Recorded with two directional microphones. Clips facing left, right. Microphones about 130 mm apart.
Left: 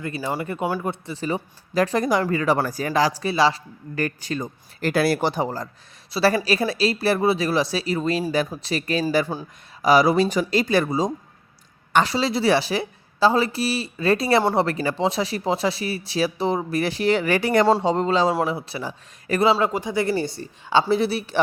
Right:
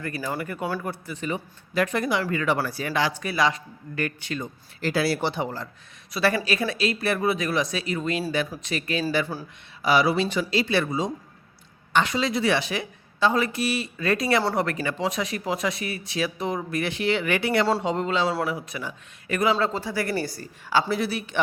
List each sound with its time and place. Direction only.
0.0 s speech: 25° left (ahead or behind)
9.3 s a woman's voice: 20° left (ahead or behind)
9.8 s speech: 40° left (ahead or behind)
19.5 s a woman's voice: 15° left (ahead or behind); by 21.3 s 30° left (ahead or behind)